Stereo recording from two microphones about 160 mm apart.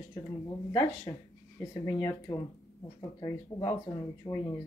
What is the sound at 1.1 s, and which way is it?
Speech, 20° left (ahead or behind).